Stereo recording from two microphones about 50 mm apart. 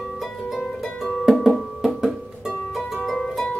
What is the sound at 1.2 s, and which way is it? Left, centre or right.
Music, centre.